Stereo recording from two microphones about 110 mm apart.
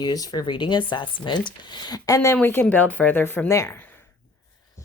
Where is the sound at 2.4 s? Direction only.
20° left (ahead or behind).